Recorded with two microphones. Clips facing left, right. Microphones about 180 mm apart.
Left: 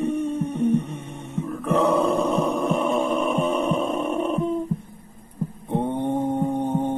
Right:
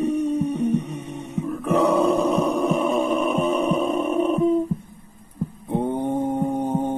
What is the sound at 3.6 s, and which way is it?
Heart murmur, centre (ahead or behind).